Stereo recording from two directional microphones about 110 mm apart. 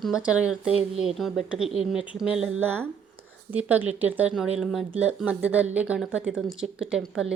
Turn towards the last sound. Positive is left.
turn(degrees=-5)  # may be behind; listen again after turning